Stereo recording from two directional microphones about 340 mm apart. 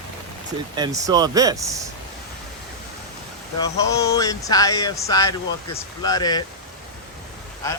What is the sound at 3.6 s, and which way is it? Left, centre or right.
Speech, centre.